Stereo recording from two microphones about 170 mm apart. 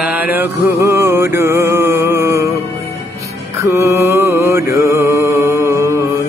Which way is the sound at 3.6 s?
15° right (ahead or behind).